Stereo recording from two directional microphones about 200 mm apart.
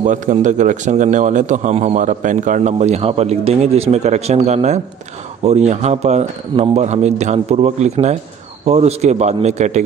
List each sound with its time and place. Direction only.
0.0 s a man's voice: 40° right (ahead or behind)